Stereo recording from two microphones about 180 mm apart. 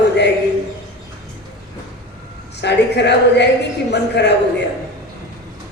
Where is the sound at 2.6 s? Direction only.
70° left (ahead or behind).